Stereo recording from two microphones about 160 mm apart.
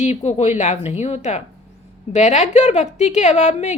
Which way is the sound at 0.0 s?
45° left (ahead or behind).